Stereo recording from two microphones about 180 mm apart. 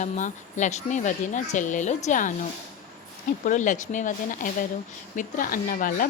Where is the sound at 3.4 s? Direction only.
45° left (ahead or behind).